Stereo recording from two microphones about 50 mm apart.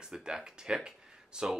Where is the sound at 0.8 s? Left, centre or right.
Centre.